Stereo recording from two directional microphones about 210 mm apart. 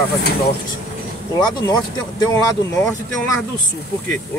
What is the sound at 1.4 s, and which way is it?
Speech, 20° left (ahead or behind).